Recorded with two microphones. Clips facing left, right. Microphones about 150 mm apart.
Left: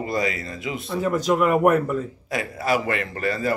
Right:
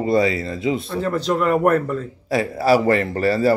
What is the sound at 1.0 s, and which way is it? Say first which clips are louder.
Speech: left 4 dB; 10° left (ahead or behind).